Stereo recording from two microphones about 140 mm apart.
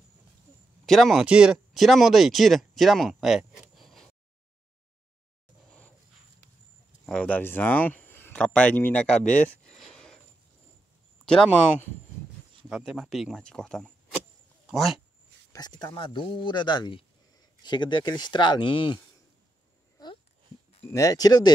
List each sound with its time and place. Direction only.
0.8 s speech: centre (ahead or behind)
7.1 s speech: 10° left (ahead or behind)
9.2 s speech: 65° left (ahead or behind)
9.7 s a sound: 5° left (ahead or behind)
12.6 s speech: 5° right (ahead or behind)
15.5 s speech: 30° left (ahead or behind)
20.9 s speech: 25° left (ahead or behind)